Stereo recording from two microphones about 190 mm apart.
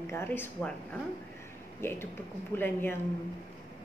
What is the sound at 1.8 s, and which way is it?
A woman's voice, 10° left (ahead or behind).